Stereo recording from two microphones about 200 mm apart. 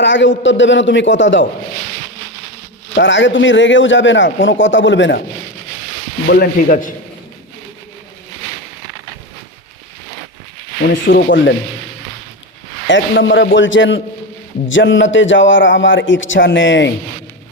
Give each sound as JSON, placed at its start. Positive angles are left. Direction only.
{"t": 0.0, "sound": "a man's voice", "side_deg": 65}
{"t": 2.9, "sound": "a man's voice", "side_deg": 65}
{"t": 6.2, "sound": "sizzle", "side_deg": 45}
{"t": 11.1, "sound": "a man's voice", "side_deg": 55}
{"t": 12.9, "sound": "a man's voice", "side_deg": 60}